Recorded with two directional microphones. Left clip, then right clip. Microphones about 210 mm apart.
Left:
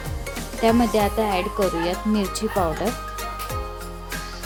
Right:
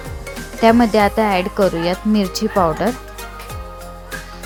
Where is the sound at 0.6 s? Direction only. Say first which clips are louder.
Right 7 dB; 20° right (ahead or behind).